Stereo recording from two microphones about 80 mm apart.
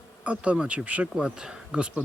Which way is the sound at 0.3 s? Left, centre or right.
Centre.